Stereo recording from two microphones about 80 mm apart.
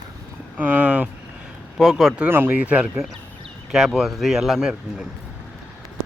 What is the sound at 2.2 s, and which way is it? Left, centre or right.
Speech, right.